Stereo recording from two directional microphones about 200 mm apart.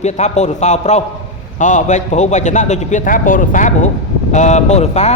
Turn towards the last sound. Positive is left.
turn(degrees=35)  # may be behind; listen again after turning